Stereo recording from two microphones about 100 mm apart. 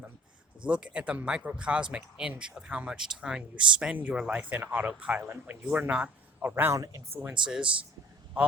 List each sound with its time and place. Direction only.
0.6 s speech: 10° right (ahead or behind)
6.7 s speech: 35° right (ahead or behind)
7.4 s speech: 5° right (ahead or behind)